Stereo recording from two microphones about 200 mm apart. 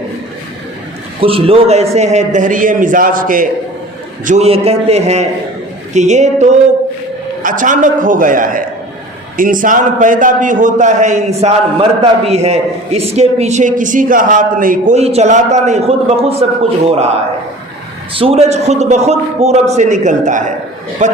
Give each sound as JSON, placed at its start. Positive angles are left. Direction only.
{"t": 1.2, "sound": "a man's voice", "side_deg": -30}
{"t": 4.3, "sound": "a man's voice", "side_deg": -30}